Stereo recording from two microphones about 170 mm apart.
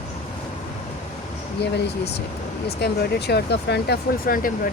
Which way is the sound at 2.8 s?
70° left (ahead or behind).